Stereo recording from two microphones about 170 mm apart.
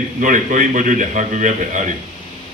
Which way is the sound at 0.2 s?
50° right (ahead or behind).